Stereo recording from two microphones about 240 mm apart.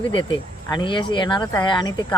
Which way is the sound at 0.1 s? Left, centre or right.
Centre.